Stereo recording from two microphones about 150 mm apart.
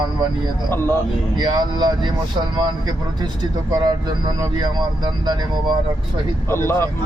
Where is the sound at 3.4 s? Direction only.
25° right (ahead or behind).